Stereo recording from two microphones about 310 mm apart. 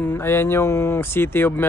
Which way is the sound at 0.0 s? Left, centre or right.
Centre.